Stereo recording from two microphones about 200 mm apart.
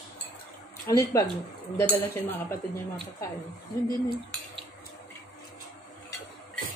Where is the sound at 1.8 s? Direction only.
10° left (ahead or behind).